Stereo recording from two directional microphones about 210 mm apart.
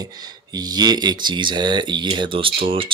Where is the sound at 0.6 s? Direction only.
20° right (ahead or behind).